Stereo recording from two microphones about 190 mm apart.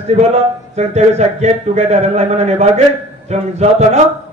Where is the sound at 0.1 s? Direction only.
35° right (ahead or behind).